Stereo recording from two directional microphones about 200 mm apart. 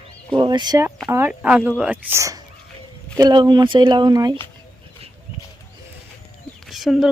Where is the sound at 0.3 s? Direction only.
25° right (ahead or behind).